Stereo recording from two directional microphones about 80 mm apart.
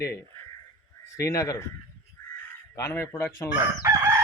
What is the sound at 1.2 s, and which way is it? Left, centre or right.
Speech, left.